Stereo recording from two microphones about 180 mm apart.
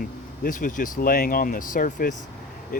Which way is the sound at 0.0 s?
50° left (ahead or behind).